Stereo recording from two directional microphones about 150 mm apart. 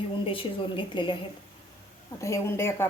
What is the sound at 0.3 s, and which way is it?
Speech, 35° left (ahead or behind).